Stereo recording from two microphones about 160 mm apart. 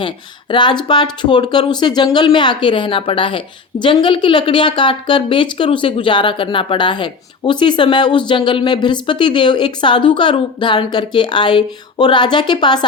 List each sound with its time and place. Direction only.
0.0 s speech: 30° left (ahead or behind)